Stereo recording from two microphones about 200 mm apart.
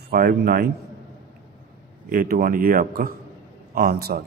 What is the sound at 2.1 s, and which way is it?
A man's voice, 45° right (ahead or behind).